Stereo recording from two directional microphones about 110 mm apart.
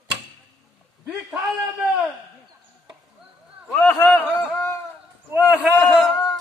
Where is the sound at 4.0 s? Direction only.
20° left (ahead or behind).